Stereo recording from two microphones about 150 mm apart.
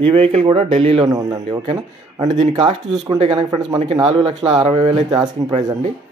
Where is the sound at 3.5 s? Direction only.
30° right (ahead or behind).